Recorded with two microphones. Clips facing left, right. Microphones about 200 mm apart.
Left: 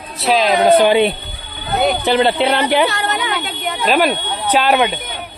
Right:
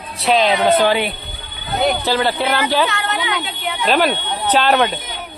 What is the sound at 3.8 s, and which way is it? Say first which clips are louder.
Speech: left 1 dB; 10° left (ahead or behind).